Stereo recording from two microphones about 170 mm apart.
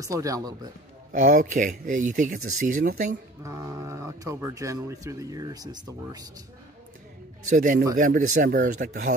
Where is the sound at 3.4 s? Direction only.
15° right (ahead or behind).